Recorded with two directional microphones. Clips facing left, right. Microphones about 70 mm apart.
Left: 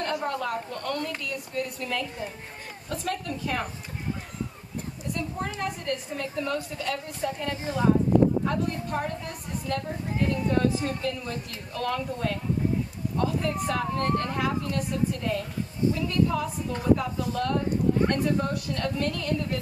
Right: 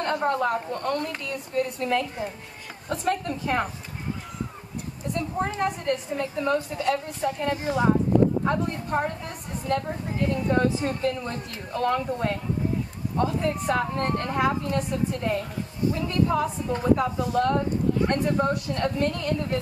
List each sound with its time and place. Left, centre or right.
0.0 s a woman's voice: right
5.1 s a woman's voice: right